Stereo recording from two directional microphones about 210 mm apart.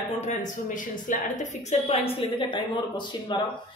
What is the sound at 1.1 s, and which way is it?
A woman's voice, 40° left (ahead or behind).